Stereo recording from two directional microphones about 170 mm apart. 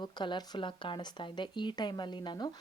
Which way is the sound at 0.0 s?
25° left (ahead or behind).